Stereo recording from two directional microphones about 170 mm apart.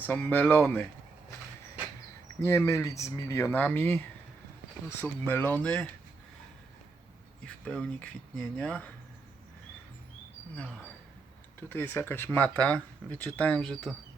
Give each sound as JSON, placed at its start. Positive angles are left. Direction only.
{"t": 0.0, "sound": "speech", "side_deg": 10}
{"t": 2.4, "sound": "speech", "side_deg": 15}
{"t": 7.4, "sound": "speech", "side_deg": 5}
{"t": 10.5, "sound": "speech", "side_deg": 10}